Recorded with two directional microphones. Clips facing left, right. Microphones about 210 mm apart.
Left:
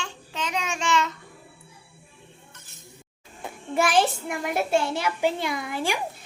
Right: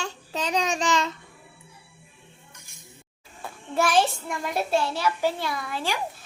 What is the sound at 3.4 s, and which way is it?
Child singing, 15° left (ahead or behind).